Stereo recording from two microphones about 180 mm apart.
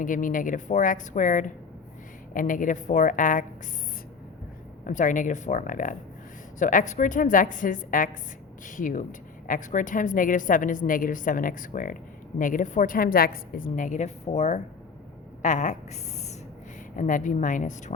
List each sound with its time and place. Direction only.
0.0 s a woman's voice: 50° left (ahead or behind)
4.9 s a woman's voice: 45° left (ahead or behind)
16.9 s a woman's voice: 45° left (ahead or behind)